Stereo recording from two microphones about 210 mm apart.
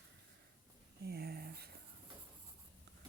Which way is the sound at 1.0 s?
50° right (ahead or behind).